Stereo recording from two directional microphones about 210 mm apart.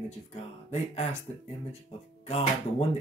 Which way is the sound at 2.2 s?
30° left (ahead or behind).